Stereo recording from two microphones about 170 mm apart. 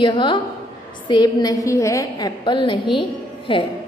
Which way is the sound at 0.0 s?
30° left (ahead or behind).